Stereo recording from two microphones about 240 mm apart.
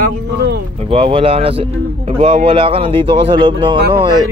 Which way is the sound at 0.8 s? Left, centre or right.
Right.